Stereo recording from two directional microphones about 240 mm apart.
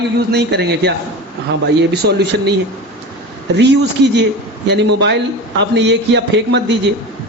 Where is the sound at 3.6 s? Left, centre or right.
Right.